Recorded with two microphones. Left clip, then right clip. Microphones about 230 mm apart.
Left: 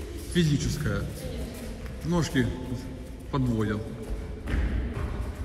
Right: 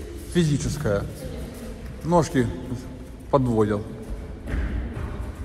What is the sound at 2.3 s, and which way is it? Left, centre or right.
Speech, right.